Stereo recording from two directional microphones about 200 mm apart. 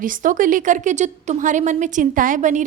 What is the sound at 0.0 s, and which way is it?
A woman's voice, 40° right (ahead or behind).